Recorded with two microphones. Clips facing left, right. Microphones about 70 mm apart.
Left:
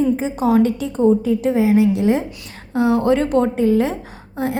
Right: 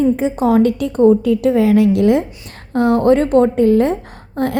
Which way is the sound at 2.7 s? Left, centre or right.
Right.